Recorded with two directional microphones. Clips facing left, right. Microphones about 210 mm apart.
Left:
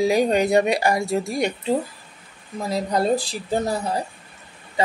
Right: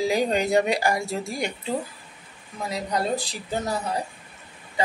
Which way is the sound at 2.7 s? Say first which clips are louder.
Left 5 dB; 30° left (ahead or behind).